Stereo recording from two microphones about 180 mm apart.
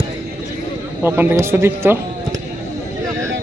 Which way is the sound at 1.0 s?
10° right (ahead or behind).